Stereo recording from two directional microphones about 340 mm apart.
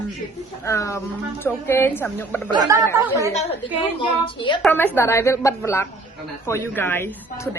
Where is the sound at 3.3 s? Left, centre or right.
Centre.